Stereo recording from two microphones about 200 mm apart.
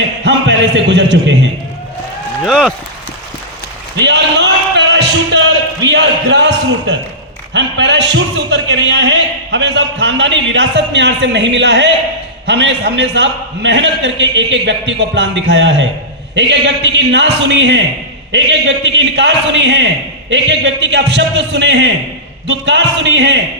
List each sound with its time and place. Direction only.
0.3 s a man's voice: 60° right (ahead or behind)
2.4 s speech: centre (ahead or behind)
3.9 s a sound: 60° right (ahead or behind)
7.5 s a man's voice: 60° right (ahead or behind)
18.9 s a man's voice: 65° right (ahead or behind)